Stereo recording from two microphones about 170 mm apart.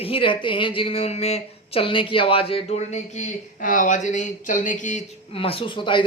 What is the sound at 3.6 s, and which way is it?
Speech, 50° left (ahead or behind).